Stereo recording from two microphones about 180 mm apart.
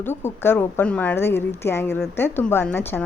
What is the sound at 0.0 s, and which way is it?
Speech, 10° left (ahead or behind).